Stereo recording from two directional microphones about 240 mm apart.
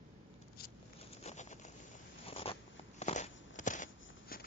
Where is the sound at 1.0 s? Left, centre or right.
Left.